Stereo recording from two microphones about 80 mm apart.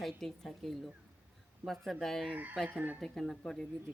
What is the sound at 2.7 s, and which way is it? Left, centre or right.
Speech, centre.